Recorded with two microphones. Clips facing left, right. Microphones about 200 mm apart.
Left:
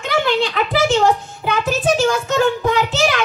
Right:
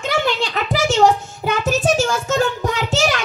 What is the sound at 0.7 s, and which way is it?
Child singing, 45° right (ahead or behind).